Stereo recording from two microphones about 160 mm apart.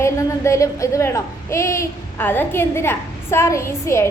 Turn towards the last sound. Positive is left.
turn(degrees=15)  # may be behind; listen again after turning